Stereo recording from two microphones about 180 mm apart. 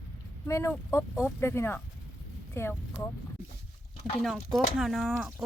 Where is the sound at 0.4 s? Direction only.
15° left (ahead or behind).